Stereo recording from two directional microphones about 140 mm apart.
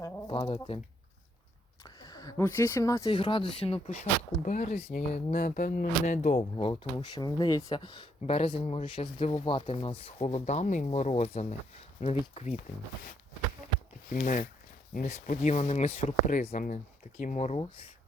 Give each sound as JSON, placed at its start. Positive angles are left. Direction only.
{"t": 0.3, "sound": "speech", "side_deg": 45}
{"t": 1.8, "sound": "a sound", "side_deg": 25}
{"t": 2.6, "sound": "speech", "side_deg": 15}
{"t": 4.4, "sound": "speech", "side_deg": 60}
{"t": 6.6, "sound": "speech", "side_deg": 35}
{"t": 14.1, "sound": "speech", "side_deg": 65}
{"t": 15.0, "sound": "speech", "side_deg": 55}